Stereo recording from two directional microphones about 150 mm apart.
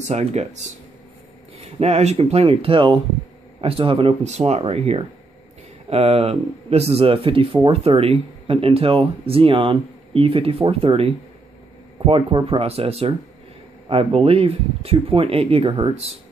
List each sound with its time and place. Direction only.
0.1 s speech: 50° right (ahead or behind)
1.6 s speech: 45° right (ahead or behind)
12.1 s speech: 35° right (ahead or behind)